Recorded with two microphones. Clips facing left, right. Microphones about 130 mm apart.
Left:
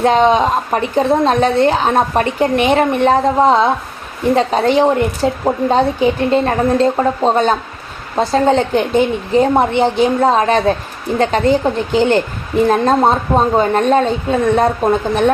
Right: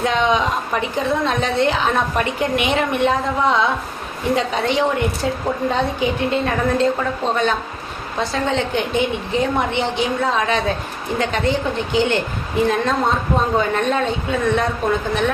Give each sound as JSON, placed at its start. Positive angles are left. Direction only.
{"t": 0.0, "sound": "a woman's voice", "side_deg": 35}
{"t": 9.8, "sound": "a woman's voice", "side_deg": 50}
{"t": 10.2, "sound": "a woman's voice", "side_deg": 40}